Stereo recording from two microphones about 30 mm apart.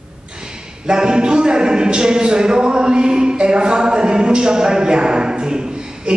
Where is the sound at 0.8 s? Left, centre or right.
Right.